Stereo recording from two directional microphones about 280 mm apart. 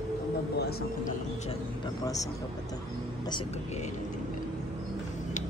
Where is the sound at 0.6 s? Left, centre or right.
Left.